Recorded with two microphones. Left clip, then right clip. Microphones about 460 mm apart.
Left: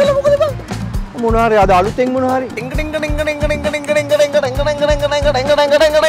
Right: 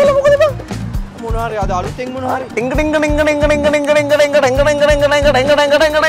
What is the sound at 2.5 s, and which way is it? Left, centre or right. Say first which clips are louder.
Speech: right 6 dB; right.